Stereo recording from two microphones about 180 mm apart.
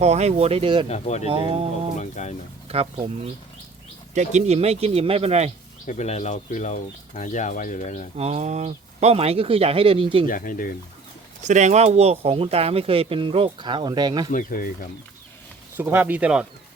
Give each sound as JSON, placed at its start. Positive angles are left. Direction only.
{"t": 0.0, "sound": "speech", "side_deg": -35}
{"t": 0.9, "sound": "speech", "side_deg": 35}
{"t": 1.2, "sound": "speech", "side_deg": -30}
{"t": 2.0, "sound": "speech", "side_deg": 40}
{"t": 2.6, "sound": "speech", "side_deg": -35}
{"t": 4.1, "sound": "speech", "side_deg": -40}
{"t": 5.8, "sound": "speech", "side_deg": 40}
{"t": 8.1, "sound": "speech", "side_deg": -40}
{"t": 10.2, "sound": "speech", "side_deg": 50}
{"t": 11.4, "sound": "speech", "side_deg": -40}
{"t": 14.3, "sound": "speech", "side_deg": 50}
{"t": 15.8, "sound": "speech", "side_deg": -10}